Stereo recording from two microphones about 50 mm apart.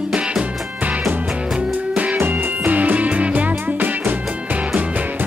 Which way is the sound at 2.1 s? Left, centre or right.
Right.